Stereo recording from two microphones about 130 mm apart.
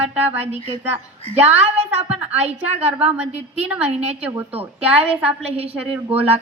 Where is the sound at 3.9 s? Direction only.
50° right (ahead or behind).